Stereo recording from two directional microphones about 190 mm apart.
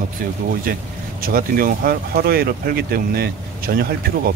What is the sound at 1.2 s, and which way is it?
Speech, 50° right (ahead or behind).